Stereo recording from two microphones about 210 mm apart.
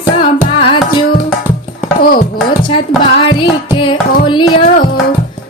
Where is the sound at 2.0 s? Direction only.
45° left (ahead or behind).